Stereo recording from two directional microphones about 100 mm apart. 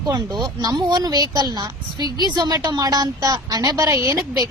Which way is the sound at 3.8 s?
25° right (ahead or behind).